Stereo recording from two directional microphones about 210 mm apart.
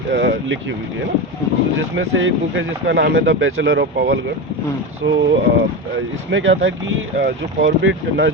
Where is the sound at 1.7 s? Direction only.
65° right (ahead or behind).